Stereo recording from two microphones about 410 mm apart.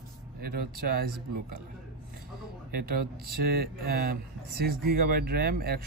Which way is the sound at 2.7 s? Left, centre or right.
Right.